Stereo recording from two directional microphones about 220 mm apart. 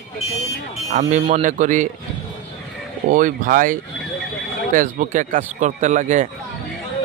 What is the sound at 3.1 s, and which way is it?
Speech, 35° right (ahead or behind).